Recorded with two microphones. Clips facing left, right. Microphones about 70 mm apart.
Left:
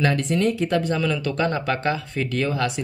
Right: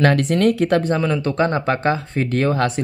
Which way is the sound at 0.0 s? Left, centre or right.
Right.